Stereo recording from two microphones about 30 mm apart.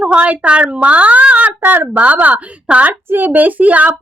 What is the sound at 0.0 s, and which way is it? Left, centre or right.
A woman's voice, right.